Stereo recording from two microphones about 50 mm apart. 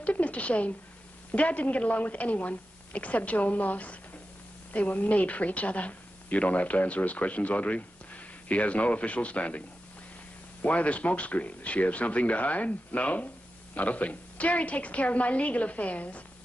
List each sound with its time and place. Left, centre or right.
0.0 s a sound: left
1.3 s a woman's voice: left
10.6 s a woman's voice: left